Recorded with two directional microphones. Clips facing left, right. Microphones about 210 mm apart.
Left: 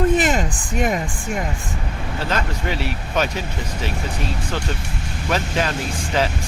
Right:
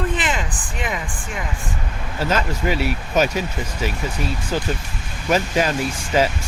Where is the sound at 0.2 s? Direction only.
45° left (ahead or behind).